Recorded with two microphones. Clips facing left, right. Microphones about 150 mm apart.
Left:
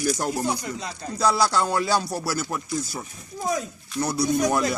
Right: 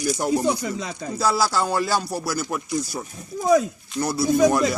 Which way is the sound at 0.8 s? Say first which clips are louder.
Right 3 dB; 90° right.